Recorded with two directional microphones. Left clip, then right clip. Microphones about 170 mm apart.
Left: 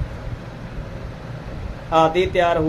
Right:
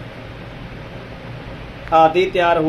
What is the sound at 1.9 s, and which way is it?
Speech, 20° right (ahead or behind).